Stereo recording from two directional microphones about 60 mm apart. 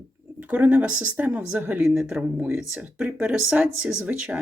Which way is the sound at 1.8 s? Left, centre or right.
Centre.